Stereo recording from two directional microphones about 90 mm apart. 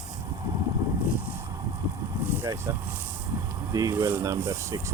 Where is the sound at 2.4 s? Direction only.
40° right (ahead or behind).